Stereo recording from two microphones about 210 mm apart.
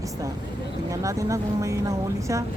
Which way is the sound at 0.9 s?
15° right (ahead or behind).